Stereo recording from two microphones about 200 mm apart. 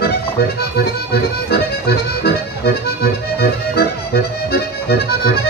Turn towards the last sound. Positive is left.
turn(degrees=50)  # may be behind; listen again after turning